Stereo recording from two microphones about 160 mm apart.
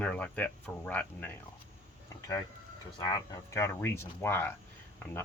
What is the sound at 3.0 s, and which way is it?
Speech, 20° left (ahead or behind).